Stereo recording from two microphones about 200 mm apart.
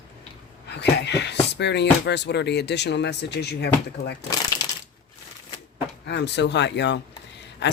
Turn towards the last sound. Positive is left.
turn(degrees=60)  # may be behind; listen again after turning